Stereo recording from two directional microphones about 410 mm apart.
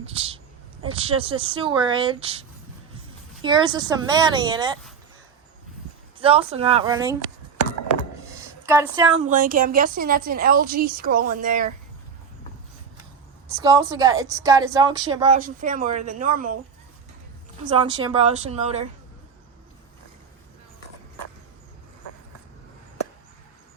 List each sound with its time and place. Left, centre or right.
0.0 s a woman's voice: centre
6.1 s a woman's voice: centre
8.4 s a sound: centre
9.2 s a woman's voice: centre
13.5 s a woman's voice: centre
17.7 s a woman's voice: centre